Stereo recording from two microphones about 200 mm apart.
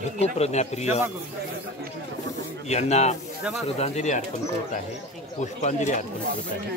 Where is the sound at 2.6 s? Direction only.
35° left (ahead or behind).